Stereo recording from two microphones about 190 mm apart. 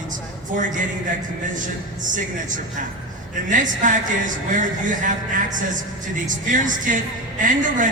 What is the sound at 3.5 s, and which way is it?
A woman's voice, 45° right (ahead or behind).